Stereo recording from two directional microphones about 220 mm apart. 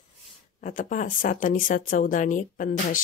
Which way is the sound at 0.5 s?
35° left (ahead or behind).